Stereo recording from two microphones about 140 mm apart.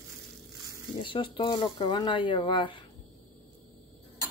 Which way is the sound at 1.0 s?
35° left (ahead or behind).